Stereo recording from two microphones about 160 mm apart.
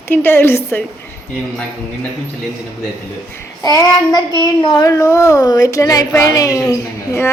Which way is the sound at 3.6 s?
25° left (ahead or behind).